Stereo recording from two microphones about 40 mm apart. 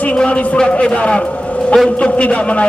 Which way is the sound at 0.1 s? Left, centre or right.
Left.